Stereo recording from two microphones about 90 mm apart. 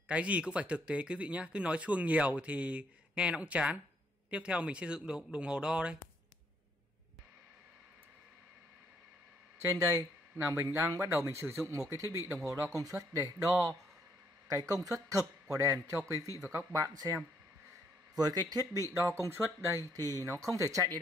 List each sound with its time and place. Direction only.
0.1 s speech: 15° right (ahead or behind)
9.6 s speech: 35° right (ahead or behind)
19.9 s speech: 40° right (ahead or behind)